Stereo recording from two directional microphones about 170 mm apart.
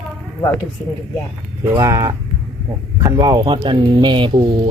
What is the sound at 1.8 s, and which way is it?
Speech, 20° right (ahead or behind).